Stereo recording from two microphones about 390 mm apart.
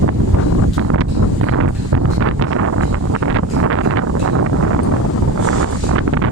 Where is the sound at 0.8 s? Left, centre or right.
Right.